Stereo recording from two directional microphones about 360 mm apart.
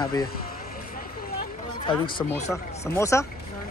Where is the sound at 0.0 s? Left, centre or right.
Centre.